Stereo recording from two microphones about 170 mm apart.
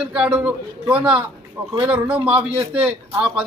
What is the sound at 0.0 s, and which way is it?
A man's voice, 5° right (ahead or behind).